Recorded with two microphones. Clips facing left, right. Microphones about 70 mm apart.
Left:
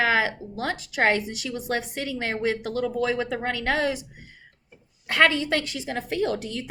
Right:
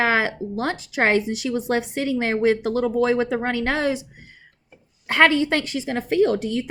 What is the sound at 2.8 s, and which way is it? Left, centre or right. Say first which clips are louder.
Speech: right 5 dB; right.